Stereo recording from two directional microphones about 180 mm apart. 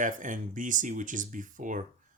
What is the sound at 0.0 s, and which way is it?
Speech, 45° right (ahead or behind).